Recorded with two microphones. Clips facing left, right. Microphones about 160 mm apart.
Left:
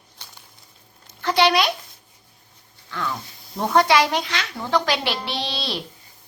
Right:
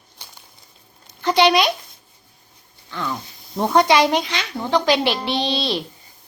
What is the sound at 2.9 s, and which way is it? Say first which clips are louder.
A woman's voice: right 1 dB; 15° right (ahead or behind).